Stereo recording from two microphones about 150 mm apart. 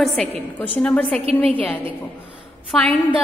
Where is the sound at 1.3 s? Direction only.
40° right (ahead or behind).